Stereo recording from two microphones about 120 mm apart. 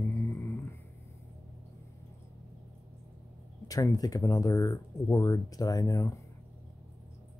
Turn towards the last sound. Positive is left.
turn(degrees=30)  # may be behind; listen again after turning